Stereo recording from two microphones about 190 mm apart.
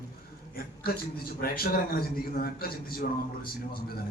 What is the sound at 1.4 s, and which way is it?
A man's voice, 50° left (ahead or behind).